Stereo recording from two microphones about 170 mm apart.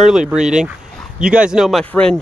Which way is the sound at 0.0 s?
5° right (ahead or behind).